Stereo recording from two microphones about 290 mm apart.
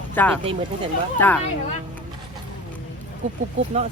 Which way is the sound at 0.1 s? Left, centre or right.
Centre.